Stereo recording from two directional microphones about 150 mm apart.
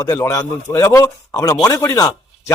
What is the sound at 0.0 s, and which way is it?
Speech, 20° left (ahead or behind).